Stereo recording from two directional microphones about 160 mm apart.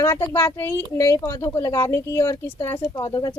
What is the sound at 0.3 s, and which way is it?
A woman's voice, 15° left (ahead or behind).